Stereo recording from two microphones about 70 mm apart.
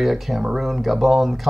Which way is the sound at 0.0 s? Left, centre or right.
Centre.